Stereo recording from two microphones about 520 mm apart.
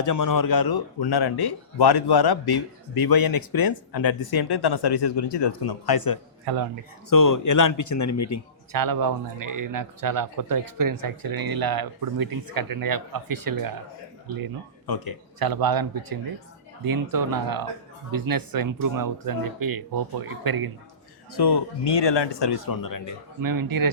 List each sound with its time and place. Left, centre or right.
0.0 s speech: left
6.4 s a man's voice: right
7.1 s speech: left
8.7 s speech: right
14.8 s speech: left
15.4 s speech: right
21.3 s speech: left
23.4 s speech: right